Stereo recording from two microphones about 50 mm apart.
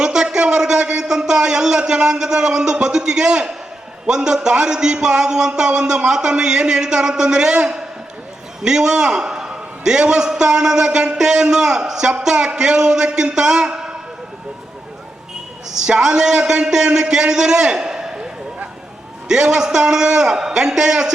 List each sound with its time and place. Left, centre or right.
0.0 s a sound: centre
4.0 s a man's voice: centre
15.8 s a man's voice: centre
19.3 s a man's voice: centre